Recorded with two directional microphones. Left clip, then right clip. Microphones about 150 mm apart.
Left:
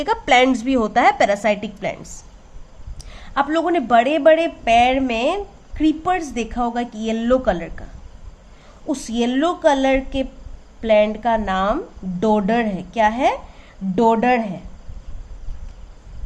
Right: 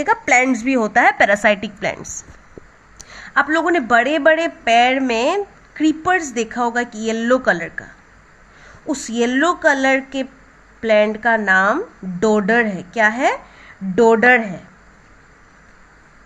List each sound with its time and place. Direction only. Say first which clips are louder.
0.0 s a woman's voice: even; 15° right (ahead or behind)
3.1 s a woman's voice: right 3 dB; 25° right (ahead or behind)
8.9 s a woman's voice: right 2 dB; 25° right (ahead or behind)